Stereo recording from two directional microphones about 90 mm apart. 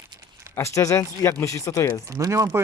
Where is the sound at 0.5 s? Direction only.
35° left (ahead or behind).